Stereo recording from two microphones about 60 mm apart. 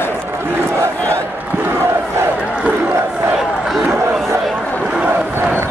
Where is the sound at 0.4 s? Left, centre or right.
Right.